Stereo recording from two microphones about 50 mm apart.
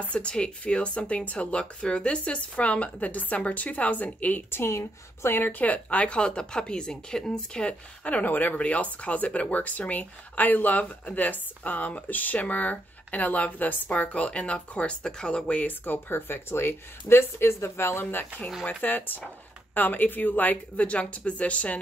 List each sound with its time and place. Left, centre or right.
0.0 s speech: left
4.5 s a woman's voice: left
5.4 s speech: left
15.8 s speech: left
18.7 s speech: left